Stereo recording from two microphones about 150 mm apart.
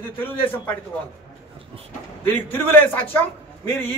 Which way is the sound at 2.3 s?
15° left (ahead or behind).